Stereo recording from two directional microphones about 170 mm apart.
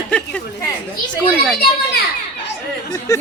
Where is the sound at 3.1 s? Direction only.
20° left (ahead or behind).